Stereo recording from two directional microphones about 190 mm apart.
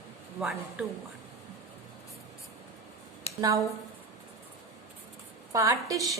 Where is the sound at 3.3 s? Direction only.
30° left (ahead or behind).